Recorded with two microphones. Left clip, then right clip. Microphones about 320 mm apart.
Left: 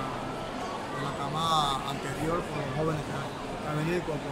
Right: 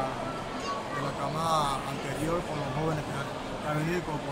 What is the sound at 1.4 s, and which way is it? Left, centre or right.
Speech, centre.